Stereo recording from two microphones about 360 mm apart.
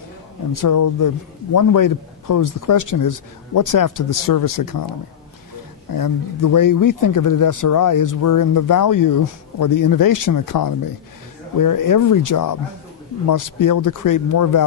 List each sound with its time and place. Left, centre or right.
0.5 s speech: left